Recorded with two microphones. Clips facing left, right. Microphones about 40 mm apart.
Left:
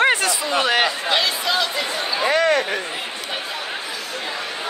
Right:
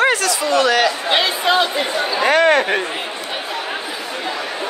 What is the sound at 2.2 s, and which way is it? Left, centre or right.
Speech, right.